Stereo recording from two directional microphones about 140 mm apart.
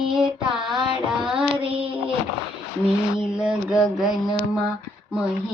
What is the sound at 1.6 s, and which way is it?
Child singing, 40° right (ahead or behind).